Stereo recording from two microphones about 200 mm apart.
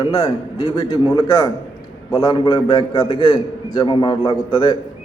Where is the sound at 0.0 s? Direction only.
15° left (ahead or behind).